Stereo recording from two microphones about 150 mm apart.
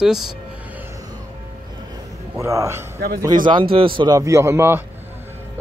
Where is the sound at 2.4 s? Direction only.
20° right (ahead or behind).